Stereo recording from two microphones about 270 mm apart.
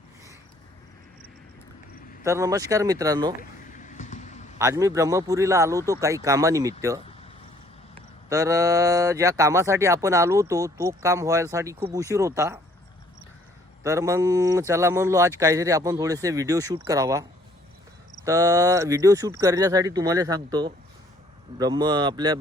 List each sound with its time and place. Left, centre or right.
2.2 s speech: centre
3.7 s a sound: left
4.5 s speech: centre
8.3 s speech: centre
13.8 s speech: centre